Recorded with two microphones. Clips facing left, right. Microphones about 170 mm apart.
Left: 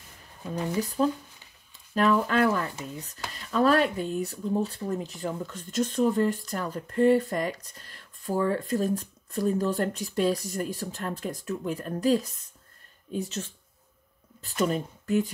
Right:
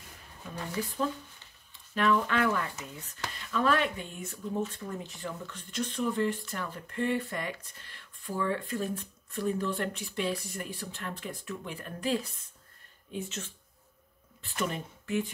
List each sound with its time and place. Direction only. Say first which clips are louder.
1.0 s speech: left 7 dB; 40° left (ahead or behind)